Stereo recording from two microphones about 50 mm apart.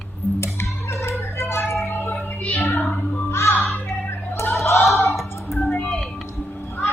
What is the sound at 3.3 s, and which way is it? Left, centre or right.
Music, left.